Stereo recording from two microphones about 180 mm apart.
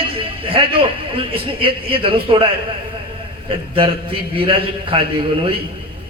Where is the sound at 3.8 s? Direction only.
30° right (ahead or behind).